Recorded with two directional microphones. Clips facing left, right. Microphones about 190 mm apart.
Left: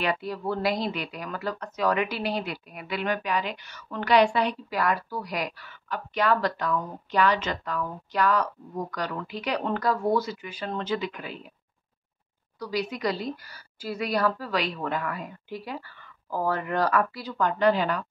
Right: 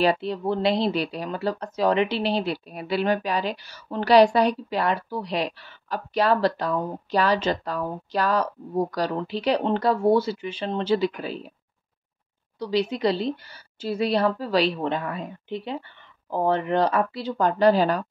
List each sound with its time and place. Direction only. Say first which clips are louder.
0.0 s speech: right 6 dB; 30° right (ahead or behind)
4.7 s speech: right 2 dB; 25° right (ahead or behind)
12.5 s a woman's voice: right 6 dB; 25° right (ahead or behind)